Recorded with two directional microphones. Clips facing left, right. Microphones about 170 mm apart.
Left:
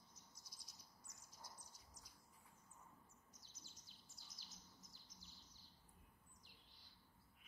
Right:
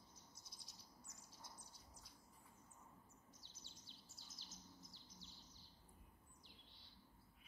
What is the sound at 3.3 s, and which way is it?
Bird vocalization, 30° right (ahead or behind).